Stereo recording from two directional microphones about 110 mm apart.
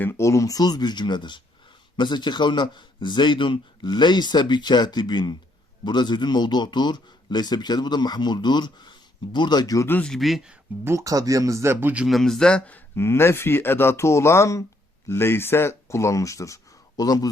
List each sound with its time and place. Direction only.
0.0 s a man's voice: 25° left (ahead or behind)
9.8 s speech: 20° left (ahead or behind)
10.1 s speech: centre (ahead or behind)
10.8 s speech: 30° right (ahead or behind)
12.0 s a man's voice: centre (ahead or behind); by 17.2 s 35° left (ahead or behind)